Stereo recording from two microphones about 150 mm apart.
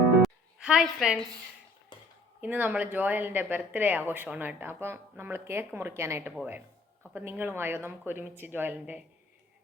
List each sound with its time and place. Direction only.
0.2 s music: 5° right (ahead or behind)
1.9 s a sound: 30° left (ahead or behind)
2.4 s speech: 10° right (ahead or behind)